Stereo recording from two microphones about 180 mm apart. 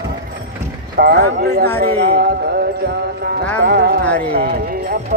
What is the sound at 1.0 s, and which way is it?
Basketball bounce, 60° right (ahead or behind).